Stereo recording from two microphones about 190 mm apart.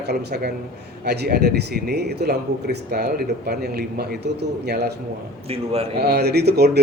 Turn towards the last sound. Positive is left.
turn(degrees=-60)  # may be behind; listen again after turning